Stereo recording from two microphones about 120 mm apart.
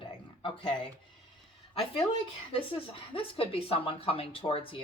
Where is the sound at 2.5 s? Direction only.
50° left (ahead or behind).